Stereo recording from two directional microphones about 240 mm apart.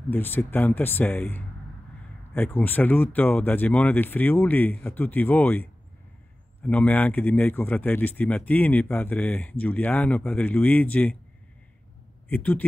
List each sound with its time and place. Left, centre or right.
0.1 s a man's voice: centre
12.3 s a man's voice: centre